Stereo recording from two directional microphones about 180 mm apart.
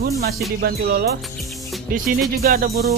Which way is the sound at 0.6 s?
60° right (ahead or behind).